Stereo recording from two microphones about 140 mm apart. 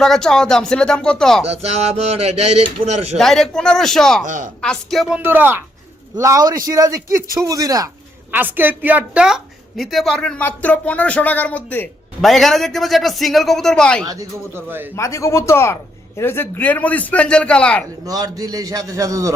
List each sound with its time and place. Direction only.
0.0 s a woman's voice: 5° left (ahead or behind)
1.5 s speech: 50° right (ahead or behind)
3.2 s a woman's voice: centre (ahead or behind)
4.3 s speech: 70° right (ahead or behind)
4.6 s a woman's voice: 5° left (ahead or behind)
5.2 s a man's voice: 15° right (ahead or behind)
8.3 s a woman's voice: 15° right (ahead or behind); by 14.1 s 5° left (ahead or behind)
14.1 s a man's voice: 20° right (ahead or behind)
14.9 s a man's voice: 20° left (ahead or behind)
18.0 s a man's voice: 25° right (ahead or behind)